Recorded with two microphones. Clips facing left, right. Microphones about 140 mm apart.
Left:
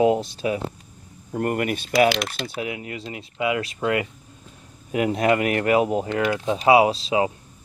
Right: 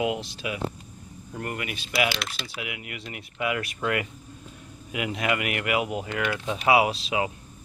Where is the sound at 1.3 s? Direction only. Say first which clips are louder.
Left 10 dB; 45° left (ahead or behind).